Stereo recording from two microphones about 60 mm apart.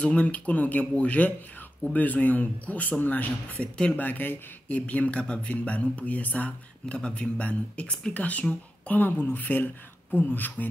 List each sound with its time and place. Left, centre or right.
0.0 s speech: left
3.5 s speech: centre
4.0 s speech: left